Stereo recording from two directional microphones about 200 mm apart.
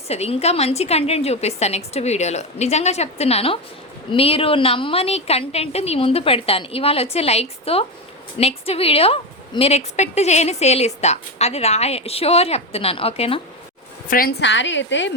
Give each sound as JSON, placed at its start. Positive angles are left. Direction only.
{"t": 0.1, "sound": "a woman's voice", "side_deg": 30}
{"t": 14.1, "sound": "a woman's voice", "side_deg": 45}
{"t": 14.4, "sound": "a woman's voice", "side_deg": 65}